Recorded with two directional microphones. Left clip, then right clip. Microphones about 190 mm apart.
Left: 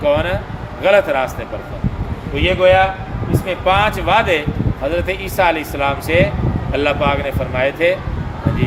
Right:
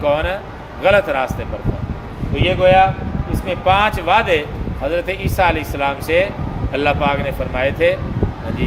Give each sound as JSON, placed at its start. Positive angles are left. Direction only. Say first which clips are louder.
{"t": 0.0, "sound": "speech", "louder": "left 1 dB", "side_deg": -15}
{"t": 2.3, "sound": "speech", "louder": "even", "side_deg": -10}